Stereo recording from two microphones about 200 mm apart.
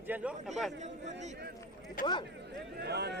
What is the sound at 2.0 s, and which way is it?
Speech, 45° left (ahead or behind).